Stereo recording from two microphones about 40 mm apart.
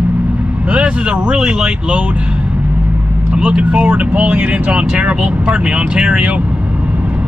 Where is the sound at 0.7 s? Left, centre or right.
Right.